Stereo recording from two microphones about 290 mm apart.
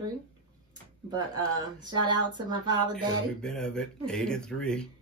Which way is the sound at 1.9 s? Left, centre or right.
Centre.